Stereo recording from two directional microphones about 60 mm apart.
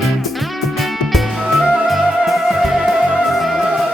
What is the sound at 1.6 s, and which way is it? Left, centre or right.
Music, centre.